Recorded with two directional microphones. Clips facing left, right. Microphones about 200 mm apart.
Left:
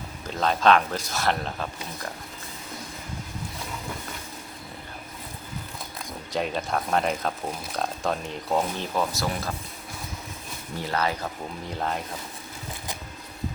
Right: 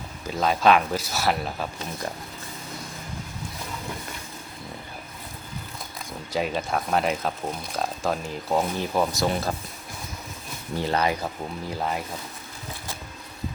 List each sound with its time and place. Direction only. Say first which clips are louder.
0.3 s speech: right 1 dB; 10° right (ahead or behind)
6.3 s speech: right 1 dB; centre (ahead or behind)
10.9 s speech: right 2 dB; 15° right (ahead or behind)
11.8 s speech: even; 5° right (ahead or behind)